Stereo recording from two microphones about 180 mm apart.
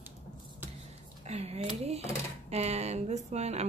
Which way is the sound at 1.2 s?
35° right (ahead or behind).